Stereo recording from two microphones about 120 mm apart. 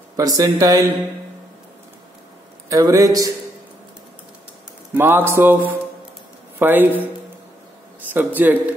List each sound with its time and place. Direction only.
0.1 s speech: 30° right (ahead or behind)
2.7 s speech: 30° right (ahead or behind)
4.9 s speech: 20° right (ahead or behind)
8.1 s speech: 15° right (ahead or behind)